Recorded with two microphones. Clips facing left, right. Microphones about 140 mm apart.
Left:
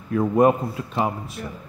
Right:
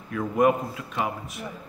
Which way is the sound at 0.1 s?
30° left (ahead or behind).